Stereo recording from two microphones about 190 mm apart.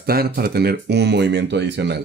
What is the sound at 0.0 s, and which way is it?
Speech, 55° right (ahead or behind).